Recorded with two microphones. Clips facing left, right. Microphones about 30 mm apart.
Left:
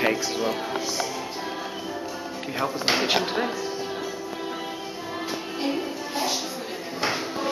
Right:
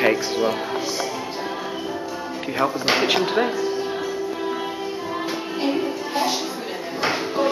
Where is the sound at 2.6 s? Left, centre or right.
Centre.